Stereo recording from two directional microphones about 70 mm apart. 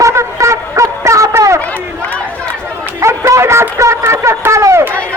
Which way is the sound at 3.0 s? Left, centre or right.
Right.